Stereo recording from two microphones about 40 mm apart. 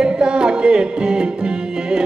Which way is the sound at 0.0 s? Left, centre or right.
Right.